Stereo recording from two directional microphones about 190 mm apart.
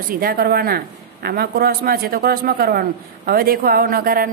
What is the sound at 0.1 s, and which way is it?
Speech, 50° right (ahead or behind).